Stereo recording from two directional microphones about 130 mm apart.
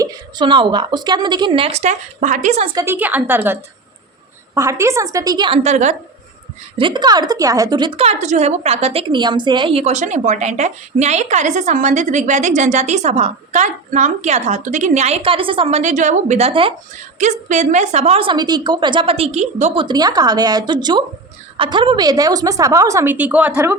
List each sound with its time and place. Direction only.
0.0 s a woman's voice: 30° right (ahead or behind)
1.8 s a woman's voice: 70° right (ahead or behind)
2.7 s a woman's voice: 20° right (ahead or behind)
5.6 s a woman's voice: 65° right (ahead or behind)
6.7 s a woman's voice: 40° right (ahead or behind)
9.8 s a woman's voice: 65° right (ahead or behind)
16.5 s a woman's voice: 45° right (ahead or behind)
17.5 s a woman's voice: 65° right (ahead or behind)
19.7 s a woman's voice: 35° right (ahead or behind); by 23.7 s 15° right (ahead or behind)